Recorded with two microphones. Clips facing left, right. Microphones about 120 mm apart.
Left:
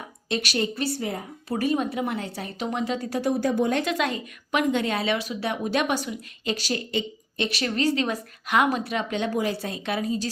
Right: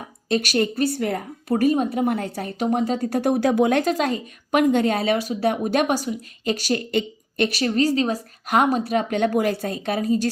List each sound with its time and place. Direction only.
0.3 s speech: 45° right (ahead or behind); by 3.8 s 80° right
3.8 s speech: 40° right (ahead or behind)
7.6 s a woman's voice: 40° right (ahead or behind)